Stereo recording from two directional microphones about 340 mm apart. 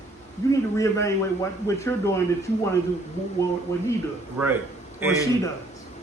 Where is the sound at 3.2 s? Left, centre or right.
Centre.